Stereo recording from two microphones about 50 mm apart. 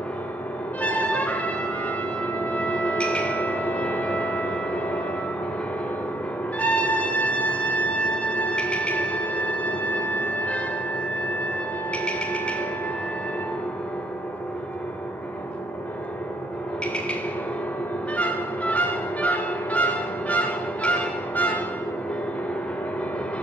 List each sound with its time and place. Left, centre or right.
0.8 s music: left
6.6 s music: left
11.9 s music: left
16.8 s a sound: left
18.1 s music: left